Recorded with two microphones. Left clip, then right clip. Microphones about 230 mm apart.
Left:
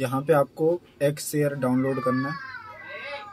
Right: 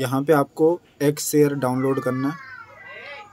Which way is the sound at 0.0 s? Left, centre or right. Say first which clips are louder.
Right 2 dB; right.